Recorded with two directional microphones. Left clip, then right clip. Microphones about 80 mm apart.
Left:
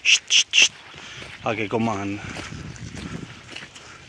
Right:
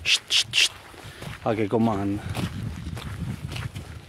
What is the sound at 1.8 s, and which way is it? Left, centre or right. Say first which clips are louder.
Speech: even; right.